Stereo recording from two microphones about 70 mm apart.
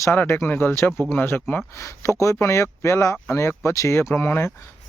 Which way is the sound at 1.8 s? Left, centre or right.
Left.